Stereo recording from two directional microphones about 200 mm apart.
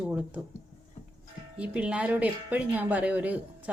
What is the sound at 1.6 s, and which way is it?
Speech, 5° right (ahead or behind).